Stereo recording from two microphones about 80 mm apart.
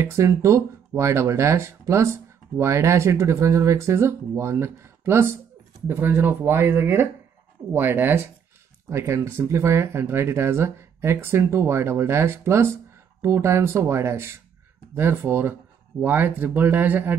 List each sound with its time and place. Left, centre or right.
0.0 s speech: right